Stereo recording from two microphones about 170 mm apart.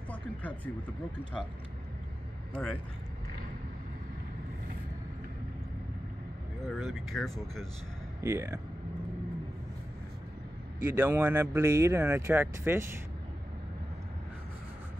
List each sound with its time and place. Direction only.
0.1 s a sound: 10° left (ahead or behind)
2.5 s speech: 5° left (ahead or behind)
6.7 s speech: centre (ahead or behind)
8.2 s speech: 15° right (ahead or behind)
10.8 s speech: 15° right (ahead or behind)